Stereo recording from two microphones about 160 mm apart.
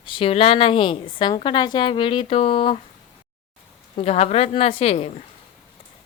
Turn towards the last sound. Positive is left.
turn(degrees=40)  # may be behind; listen again after turning